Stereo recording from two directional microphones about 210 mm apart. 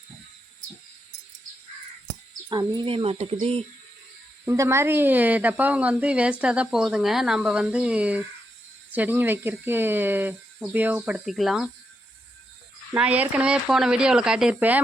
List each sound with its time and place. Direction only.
2.5 s speech: 20° right (ahead or behind)
4.4 s speech: 15° right (ahead or behind)
12.9 s speech: 5° right (ahead or behind)